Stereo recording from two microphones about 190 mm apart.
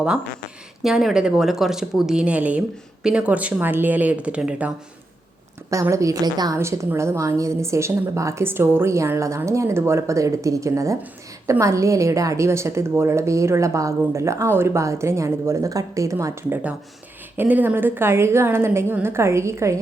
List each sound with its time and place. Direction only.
0.8 s a woman's voice: centre (ahead or behind)
5.7 s a woman's voice: 15° right (ahead or behind)